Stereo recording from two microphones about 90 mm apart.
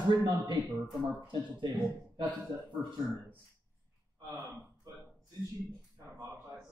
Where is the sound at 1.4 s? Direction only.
45° right (ahead or behind).